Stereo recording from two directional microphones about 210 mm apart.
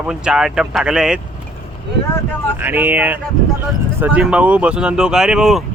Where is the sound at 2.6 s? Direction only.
10° right (ahead or behind).